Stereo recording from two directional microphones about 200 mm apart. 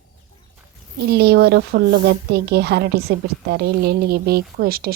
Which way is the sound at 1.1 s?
55° right (ahead or behind).